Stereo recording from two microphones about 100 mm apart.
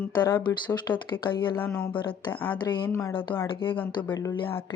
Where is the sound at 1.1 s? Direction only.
20° left (ahead or behind).